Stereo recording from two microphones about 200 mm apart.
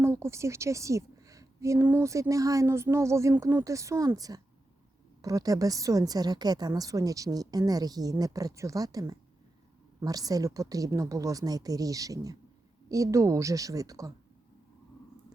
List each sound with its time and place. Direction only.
0.0 s a woman's voice: 15° right (ahead or behind)